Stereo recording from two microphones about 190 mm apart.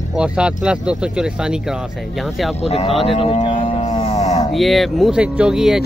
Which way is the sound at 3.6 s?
30° left (ahead or behind).